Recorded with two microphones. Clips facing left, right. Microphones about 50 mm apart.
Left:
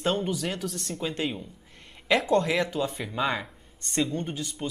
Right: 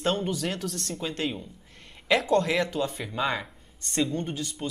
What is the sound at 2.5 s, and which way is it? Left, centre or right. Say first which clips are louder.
Speech: even; centre.